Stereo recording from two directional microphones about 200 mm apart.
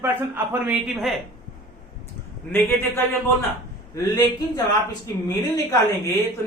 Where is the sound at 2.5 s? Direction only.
10° left (ahead or behind).